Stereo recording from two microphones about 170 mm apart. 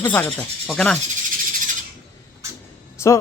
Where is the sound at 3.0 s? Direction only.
15° left (ahead or behind).